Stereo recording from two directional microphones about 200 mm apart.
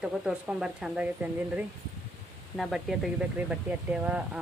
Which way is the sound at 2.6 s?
Centre (ahead or behind).